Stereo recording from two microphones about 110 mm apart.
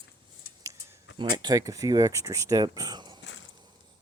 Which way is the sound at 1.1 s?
40° right (ahead or behind).